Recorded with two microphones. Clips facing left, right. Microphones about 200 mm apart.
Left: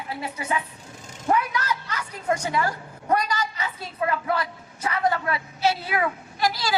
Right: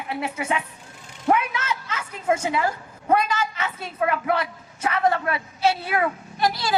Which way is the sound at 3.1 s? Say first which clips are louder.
Right 3 dB; 25° right (ahead or behind).